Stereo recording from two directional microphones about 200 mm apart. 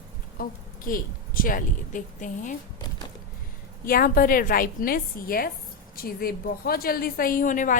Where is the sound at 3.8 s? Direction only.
45° left (ahead or behind).